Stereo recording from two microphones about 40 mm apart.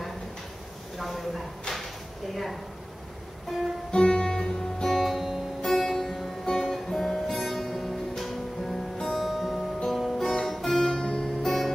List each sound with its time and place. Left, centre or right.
0.9 s speech: centre
3.9 s music: left
4.9 s music: centre
5.6 s music: centre
8.9 s music: centre
9.2 s music: centre
11.4 s music: centre